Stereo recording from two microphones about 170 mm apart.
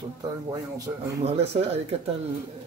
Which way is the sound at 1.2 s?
35° right (ahead or behind).